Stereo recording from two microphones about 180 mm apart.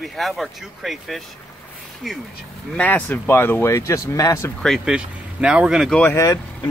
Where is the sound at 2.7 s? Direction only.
10° left (ahead or behind).